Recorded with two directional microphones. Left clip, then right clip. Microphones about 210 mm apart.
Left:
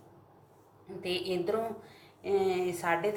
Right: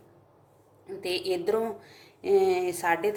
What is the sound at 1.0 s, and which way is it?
A woman's voice, 60° right (ahead or behind).